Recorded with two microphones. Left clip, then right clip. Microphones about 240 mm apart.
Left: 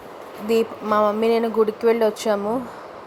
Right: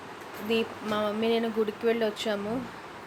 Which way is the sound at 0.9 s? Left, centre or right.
Left.